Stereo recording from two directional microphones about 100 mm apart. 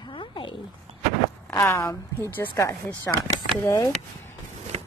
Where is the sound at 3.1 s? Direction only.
20° left (ahead or behind).